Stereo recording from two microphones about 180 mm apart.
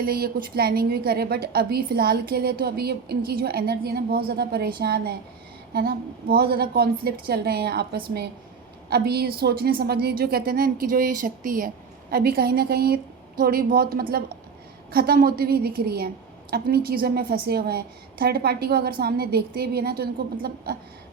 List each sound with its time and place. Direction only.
0.0 s a woman's voice: 55° right (ahead or behind)
8.9 s a woman's voice: 60° right (ahead or behind)